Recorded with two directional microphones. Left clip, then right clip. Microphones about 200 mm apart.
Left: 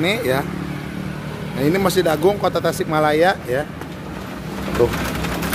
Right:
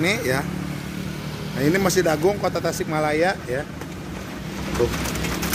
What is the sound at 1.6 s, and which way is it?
Speech, centre (ahead or behind).